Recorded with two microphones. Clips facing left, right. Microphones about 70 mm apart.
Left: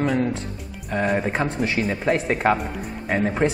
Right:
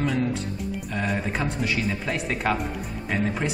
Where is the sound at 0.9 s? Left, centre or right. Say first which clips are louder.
Left 7 dB; left.